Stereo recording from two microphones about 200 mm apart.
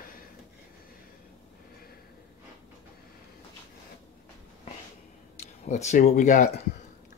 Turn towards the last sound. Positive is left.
turn(degrees=40)  # may be behind; listen again after turning